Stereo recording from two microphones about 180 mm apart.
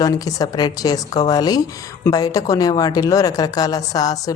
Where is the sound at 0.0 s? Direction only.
20° left (ahead or behind).